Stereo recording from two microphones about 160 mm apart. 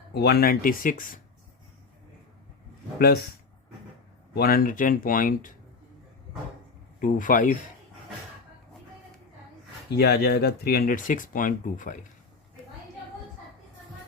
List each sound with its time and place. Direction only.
0.1 s speech: 90° left; by 1.2 s 60° left (ahead or behind)
4.4 s speech: 65° left (ahead or behind)
7.0 s speech: 55° left (ahead or behind)
9.9 s speech: 80° left; by 11.9 s 55° left (ahead or behind)